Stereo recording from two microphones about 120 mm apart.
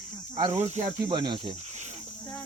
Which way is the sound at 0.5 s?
70° right (ahead or behind).